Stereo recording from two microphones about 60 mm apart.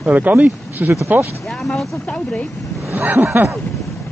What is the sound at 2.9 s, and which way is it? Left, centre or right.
Speech, right.